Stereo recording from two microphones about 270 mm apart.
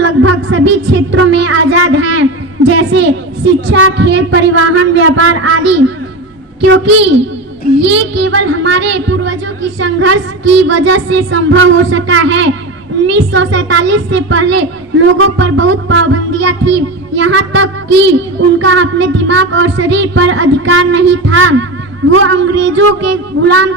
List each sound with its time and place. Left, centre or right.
0.0 s music: right
3.7 s a woman's voice: right
7.9 s music: right
9.8 s a woman's voice: right